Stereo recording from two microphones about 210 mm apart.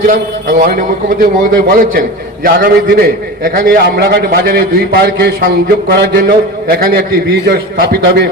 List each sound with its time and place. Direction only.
0.1 s a man's voice: 40° right (ahead or behind)